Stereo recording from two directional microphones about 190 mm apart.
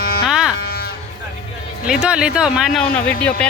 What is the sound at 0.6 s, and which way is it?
Livestock, 55° left (ahead or behind).